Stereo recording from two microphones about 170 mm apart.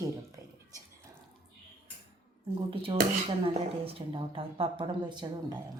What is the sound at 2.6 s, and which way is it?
Speech, 30° right (ahead or behind).